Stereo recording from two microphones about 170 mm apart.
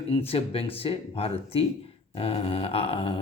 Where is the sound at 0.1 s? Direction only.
35° left (ahead or behind).